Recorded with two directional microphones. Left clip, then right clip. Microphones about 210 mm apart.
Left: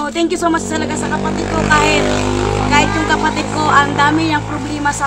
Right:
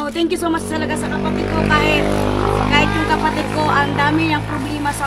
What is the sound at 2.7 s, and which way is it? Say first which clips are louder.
Speech: left 5 dB; 10° left (ahead or behind).